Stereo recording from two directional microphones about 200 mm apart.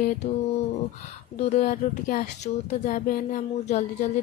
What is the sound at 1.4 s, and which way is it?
Speech, 35° left (ahead or behind).